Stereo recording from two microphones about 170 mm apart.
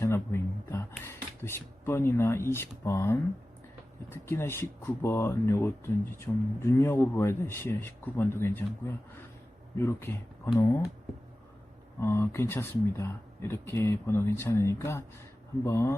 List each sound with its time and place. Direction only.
0.0 s speech: 15° left (ahead or behind)
9.7 s speech: 15° left (ahead or behind)
11.9 s speech: 15° left (ahead or behind)